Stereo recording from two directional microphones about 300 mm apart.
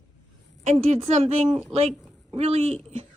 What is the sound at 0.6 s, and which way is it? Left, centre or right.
Speech, right.